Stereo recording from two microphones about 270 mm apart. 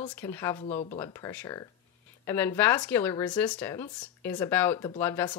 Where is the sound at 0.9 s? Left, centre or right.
Centre.